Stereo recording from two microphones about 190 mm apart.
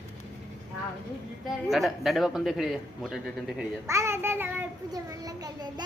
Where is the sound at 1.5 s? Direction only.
Centre (ahead or behind).